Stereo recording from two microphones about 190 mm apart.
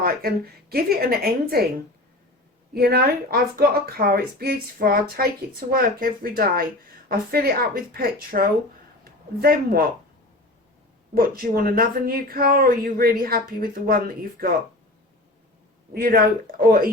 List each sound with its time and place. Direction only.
0.0 s speech: 50° right (ahead or behind)
2.7 s speech: 55° right (ahead or behind)
11.1 s speech: 50° right (ahead or behind)
15.9 s speech: 50° right (ahead or behind)